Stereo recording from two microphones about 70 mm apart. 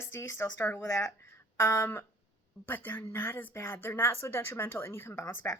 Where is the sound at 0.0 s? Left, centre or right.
Left.